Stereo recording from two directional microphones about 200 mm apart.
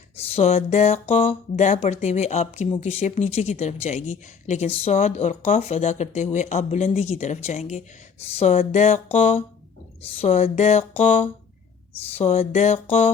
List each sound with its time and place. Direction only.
0.2 s speech: 30° left (ahead or behind)